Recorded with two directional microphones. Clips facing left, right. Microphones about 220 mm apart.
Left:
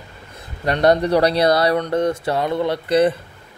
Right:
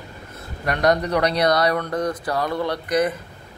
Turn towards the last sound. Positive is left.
turn(degrees=30)  # may be behind; listen again after turning